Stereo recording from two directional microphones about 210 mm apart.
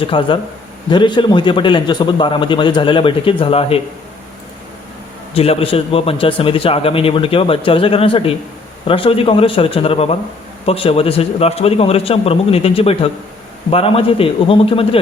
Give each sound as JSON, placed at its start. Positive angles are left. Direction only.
{"t": 0.0, "sound": "a man's voice", "side_deg": 25}
{"t": 5.3, "sound": "a man's voice", "side_deg": 30}